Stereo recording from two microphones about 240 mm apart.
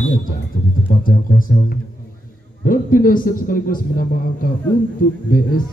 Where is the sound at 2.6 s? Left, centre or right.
Left.